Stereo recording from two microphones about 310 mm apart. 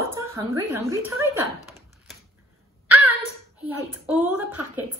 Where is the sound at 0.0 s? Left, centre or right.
Centre.